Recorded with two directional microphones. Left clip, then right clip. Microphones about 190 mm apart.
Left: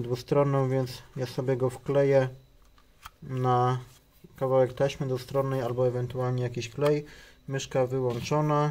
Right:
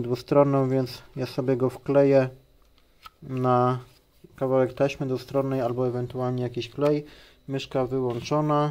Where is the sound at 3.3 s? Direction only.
25° right (ahead or behind).